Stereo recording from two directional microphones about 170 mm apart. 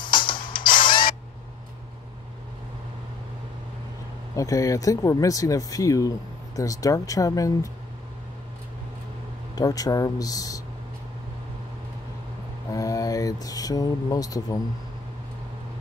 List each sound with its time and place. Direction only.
0.0 s music: 30° left (ahead or behind)
0.8 s printer: 30° left (ahead or behind)
4.4 s speech: 20° left (ahead or behind)
9.6 s speech: 20° left (ahead or behind)
12.7 s speech: 20° left (ahead or behind)